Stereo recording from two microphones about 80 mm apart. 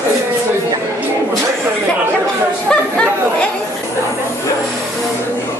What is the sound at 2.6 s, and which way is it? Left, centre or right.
Chatter, centre.